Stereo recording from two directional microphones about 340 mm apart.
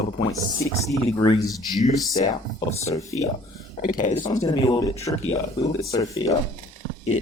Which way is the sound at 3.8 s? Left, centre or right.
Left.